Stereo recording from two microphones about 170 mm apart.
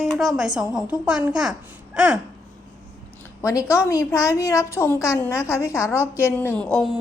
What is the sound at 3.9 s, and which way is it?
A woman's voice, 20° left (ahead or behind).